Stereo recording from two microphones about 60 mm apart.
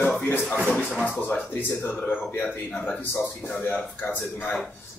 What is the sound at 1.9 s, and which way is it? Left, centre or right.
Speech, left.